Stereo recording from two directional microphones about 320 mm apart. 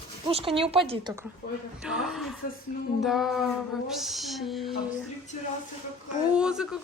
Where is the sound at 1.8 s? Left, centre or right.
Centre.